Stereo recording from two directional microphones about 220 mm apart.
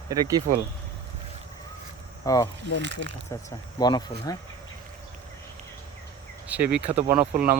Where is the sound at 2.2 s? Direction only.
15° left (ahead or behind).